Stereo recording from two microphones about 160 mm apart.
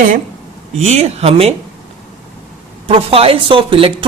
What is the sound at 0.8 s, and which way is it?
Speech, 45° right (ahead or behind).